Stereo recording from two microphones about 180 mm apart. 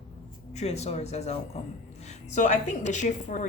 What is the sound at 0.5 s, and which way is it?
A woman's voice, 35° left (ahead or behind).